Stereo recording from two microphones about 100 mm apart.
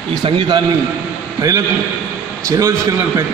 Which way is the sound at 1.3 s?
35° right (ahead or behind).